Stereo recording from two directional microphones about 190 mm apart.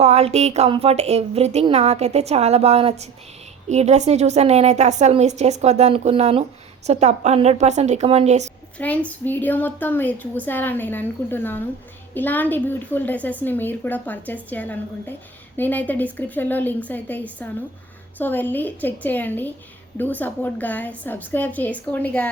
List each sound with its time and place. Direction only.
0.0 s a woman's voice: 35° right (ahead or behind)
8.8 s a woman's voice: 5° left (ahead or behind)